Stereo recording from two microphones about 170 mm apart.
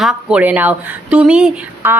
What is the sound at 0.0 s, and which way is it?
A woman's voice, 5° right (ahead or behind).